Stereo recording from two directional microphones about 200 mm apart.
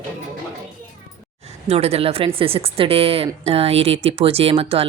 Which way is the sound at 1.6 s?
30° right (ahead or behind).